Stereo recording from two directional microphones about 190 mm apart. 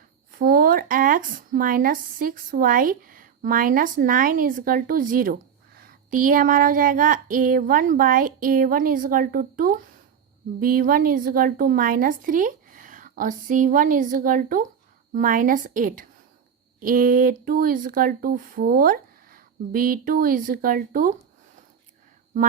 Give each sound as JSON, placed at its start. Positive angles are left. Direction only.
{"t": 0.3, "sound": "a woman's voice", "side_deg": -45}